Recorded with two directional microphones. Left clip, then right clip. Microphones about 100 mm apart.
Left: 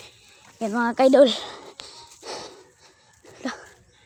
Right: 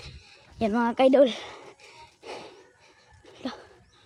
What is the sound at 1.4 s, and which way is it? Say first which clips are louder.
Whispering: left 5 dB; 40° left (ahead or behind).